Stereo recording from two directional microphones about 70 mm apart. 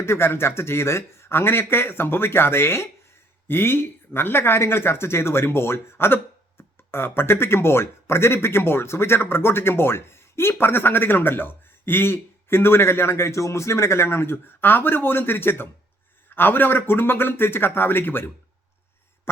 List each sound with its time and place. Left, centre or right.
0.0 s a man's voice: left